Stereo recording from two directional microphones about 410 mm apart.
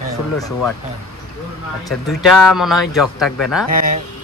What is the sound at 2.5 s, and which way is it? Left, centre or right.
Speech, centre.